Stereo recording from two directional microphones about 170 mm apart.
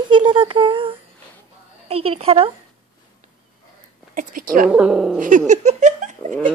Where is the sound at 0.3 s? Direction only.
30° right (ahead or behind).